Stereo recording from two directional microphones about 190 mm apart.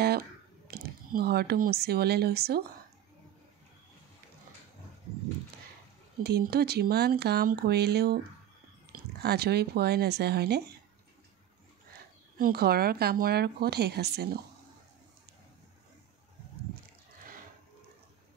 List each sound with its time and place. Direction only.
0.7 s speech: 55° right (ahead or behind)
6.2 s speech: 55° right (ahead or behind)
9.2 s speech: 55° right (ahead or behind)
12.4 s speech: 50° right (ahead or behind)